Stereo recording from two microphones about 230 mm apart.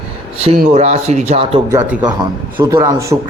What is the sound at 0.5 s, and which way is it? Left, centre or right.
Speech, right.